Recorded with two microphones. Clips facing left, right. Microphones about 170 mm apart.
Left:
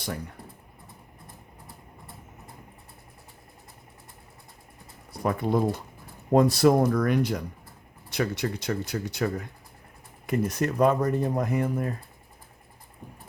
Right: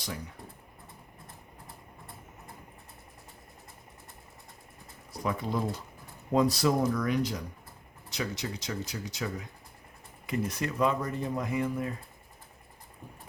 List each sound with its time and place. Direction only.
5.2 s speech: 55° left (ahead or behind)